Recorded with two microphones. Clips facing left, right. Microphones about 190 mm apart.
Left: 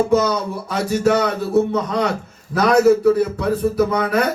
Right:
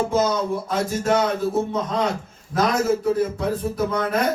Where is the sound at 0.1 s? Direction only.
70° left (ahead or behind).